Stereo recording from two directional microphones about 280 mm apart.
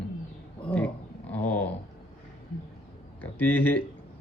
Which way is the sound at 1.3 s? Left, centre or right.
Centre.